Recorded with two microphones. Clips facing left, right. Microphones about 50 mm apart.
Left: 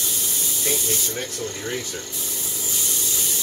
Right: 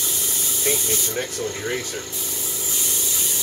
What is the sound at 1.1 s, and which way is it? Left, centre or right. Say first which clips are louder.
Speech: right 3 dB; right.